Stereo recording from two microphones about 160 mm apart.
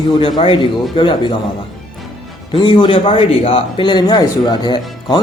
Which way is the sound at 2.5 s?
30° left (ahead or behind).